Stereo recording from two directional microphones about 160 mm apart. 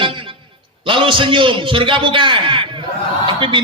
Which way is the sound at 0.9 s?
30° right (ahead or behind).